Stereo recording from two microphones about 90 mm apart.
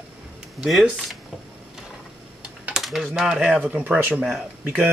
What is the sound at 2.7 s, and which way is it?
Speech, centre (ahead or behind).